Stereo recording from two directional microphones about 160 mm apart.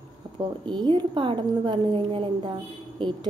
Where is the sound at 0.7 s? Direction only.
30° right (ahead or behind).